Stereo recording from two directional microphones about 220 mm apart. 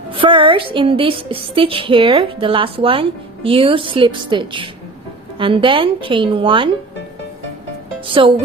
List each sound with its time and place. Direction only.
0.1 s a woman's voice: 25° right (ahead or behind)
8.0 s speech: 25° right (ahead or behind)